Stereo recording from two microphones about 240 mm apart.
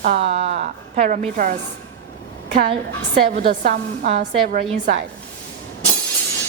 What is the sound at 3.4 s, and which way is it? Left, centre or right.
A woman's voice, right.